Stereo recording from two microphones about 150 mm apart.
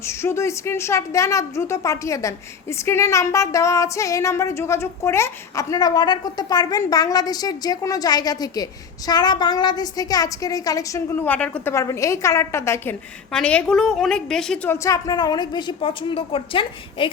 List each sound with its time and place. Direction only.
0.0 s a woman's voice: 15° left (ahead or behind)
14.8 s a woman's voice: 25° left (ahead or behind)